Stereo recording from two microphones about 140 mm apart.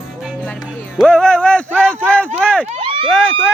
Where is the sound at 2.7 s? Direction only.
40° right (ahead or behind).